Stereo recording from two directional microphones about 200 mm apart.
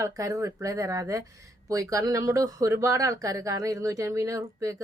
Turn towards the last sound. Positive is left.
turn(degrees=-15)  # may be behind; listen again after turning